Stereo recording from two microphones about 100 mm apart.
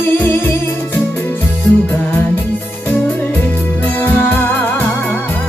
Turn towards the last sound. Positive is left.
turn(degrees=20)  # may be behind; listen again after turning